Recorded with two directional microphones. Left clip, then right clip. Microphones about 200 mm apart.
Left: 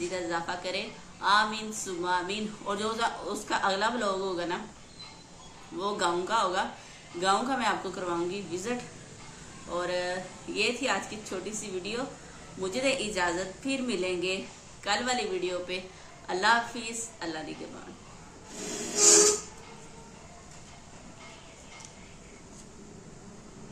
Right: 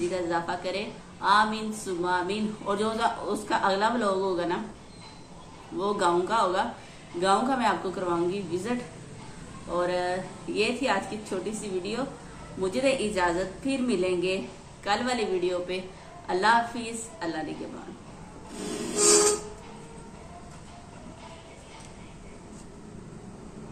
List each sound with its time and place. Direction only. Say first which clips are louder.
0.0 s a woman's voice: right 4 dB; 15° left (ahead or behind)
5.8 s a woman's voice: right 4 dB; 10° left (ahead or behind)
18.9 s a sound: even; centre (ahead or behind)